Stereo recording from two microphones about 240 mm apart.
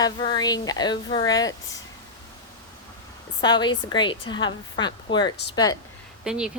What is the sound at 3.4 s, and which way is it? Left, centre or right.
A woman's voice, centre.